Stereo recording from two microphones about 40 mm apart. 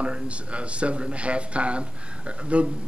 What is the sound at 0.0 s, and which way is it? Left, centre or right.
Speech, right.